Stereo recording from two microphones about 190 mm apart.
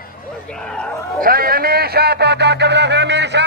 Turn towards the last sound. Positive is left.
turn(degrees=-65)  # may be behind; listen again after turning